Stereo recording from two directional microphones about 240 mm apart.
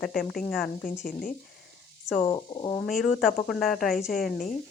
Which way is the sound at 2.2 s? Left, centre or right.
Centre.